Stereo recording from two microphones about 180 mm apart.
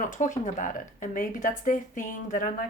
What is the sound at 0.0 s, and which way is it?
Speech, 45° left (ahead or behind).